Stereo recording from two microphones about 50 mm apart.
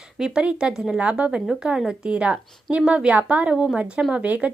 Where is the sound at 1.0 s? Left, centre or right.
Right.